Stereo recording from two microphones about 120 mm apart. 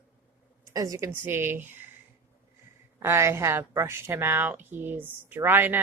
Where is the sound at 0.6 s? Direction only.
30° right (ahead or behind).